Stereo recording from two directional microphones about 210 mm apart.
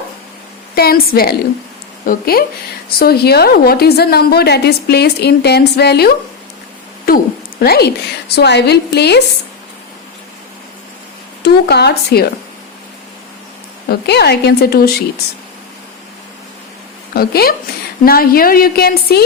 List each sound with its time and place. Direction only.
0.8 s a woman's voice: 45° left (ahead or behind)
7.1 s a sound: 45° left (ahead or behind)
7.6 s a woman's voice: 50° left (ahead or behind)
11.4 s a woman's voice: 50° left (ahead or behind)
13.8 s a woman's voice: 50° left (ahead or behind)
17.2 s a woman's voice: 45° left (ahead or behind)